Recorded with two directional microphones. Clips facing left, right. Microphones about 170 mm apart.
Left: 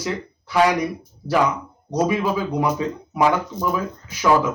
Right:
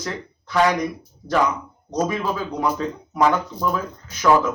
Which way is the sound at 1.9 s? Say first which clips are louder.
Left 3 dB; 10° left (ahead or behind).